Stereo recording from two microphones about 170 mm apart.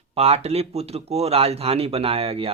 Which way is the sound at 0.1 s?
35° right (ahead or behind).